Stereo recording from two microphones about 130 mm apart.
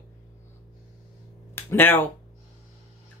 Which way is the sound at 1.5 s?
15° left (ahead or behind).